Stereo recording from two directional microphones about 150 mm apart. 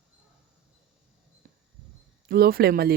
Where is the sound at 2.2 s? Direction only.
90° right.